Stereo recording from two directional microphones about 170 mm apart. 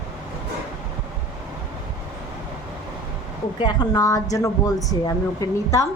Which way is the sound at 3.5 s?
25° left (ahead or behind).